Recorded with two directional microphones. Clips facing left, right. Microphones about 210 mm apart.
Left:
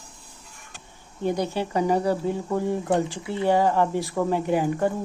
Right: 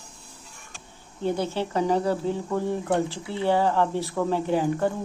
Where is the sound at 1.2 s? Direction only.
15° left (ahead or behind).